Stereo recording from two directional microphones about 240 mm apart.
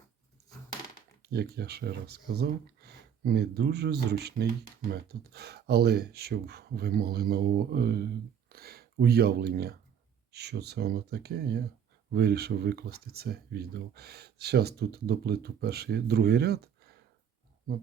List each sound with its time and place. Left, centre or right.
1.2 s speech: right